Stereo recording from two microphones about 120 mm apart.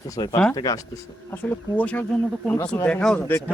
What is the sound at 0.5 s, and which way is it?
Speech, 30° left (ahead or behind).